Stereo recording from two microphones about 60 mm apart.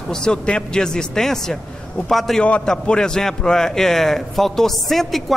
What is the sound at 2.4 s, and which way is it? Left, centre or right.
A man's voice, left.